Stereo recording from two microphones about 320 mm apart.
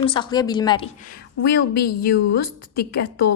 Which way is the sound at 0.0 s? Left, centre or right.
Centre.